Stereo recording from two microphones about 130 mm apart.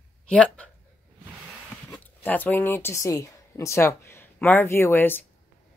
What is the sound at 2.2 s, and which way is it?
Speech, 15° left (ahead or behind).